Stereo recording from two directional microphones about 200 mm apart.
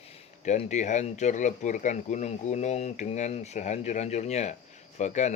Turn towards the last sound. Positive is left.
turn(degrees=35)  # may be behind; listen again after turning